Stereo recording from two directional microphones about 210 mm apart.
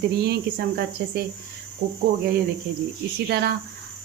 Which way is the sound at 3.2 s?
50° right (ahead or behind).